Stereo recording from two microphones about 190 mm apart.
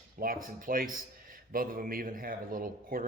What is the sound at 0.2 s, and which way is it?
A man's voice, 50° right (ahead or behind).